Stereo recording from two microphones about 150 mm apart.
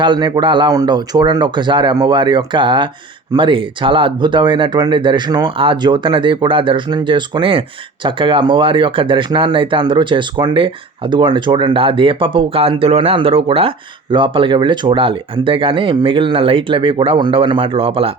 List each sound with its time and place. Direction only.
0.0 s speech: 30° right (ahead or behind)